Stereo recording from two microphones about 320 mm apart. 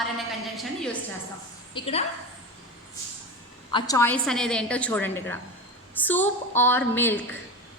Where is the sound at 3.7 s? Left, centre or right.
Centre.